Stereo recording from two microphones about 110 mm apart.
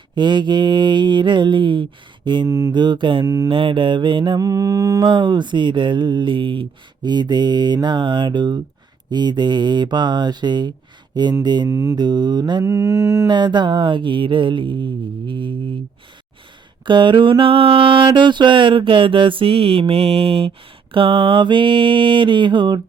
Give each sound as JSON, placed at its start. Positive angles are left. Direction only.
{"t": 0.2, "sound": "mantra", "side_deg": -45}
{"t": 2.5, "sound": "mantra", "side_deg": -30}
{"t": 2.7, "sound": "mantra", "side_deg": -45}
{"t": 3.2, "sound": "mantra", "side_deg": -30}
{"t": 3.5, "sound": "mantra", "side_deg": -50}
{"t": 11.1, "sound": "speech", "side_deg": -40}
{"t": 11.4, "sound": "mantra", "side_deg": -40}
{"t": 11.7, "sound": "mantra", "side_deg": -30}
{"t": 12.6, "sound": "mantra", "side_deg": -30}
{"t": 13.2, "sound": "mantra", "side_deg": -45}
{"t": 16.8, "sound": "mantra", "side_deg": -45}